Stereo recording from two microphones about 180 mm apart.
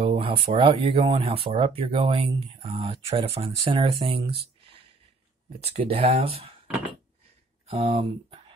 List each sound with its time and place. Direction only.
0.0 s a sound: 30° right (ahead or behind)
0.5 s speech: 30° right (ahead or behind)
7.6 s speech: 30° right (ahead or behind)